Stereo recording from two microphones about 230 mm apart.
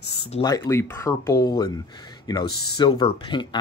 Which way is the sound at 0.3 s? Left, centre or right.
Centre.